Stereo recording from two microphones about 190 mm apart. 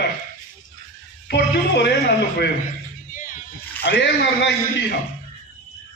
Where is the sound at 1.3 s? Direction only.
65° left (ahead or behind).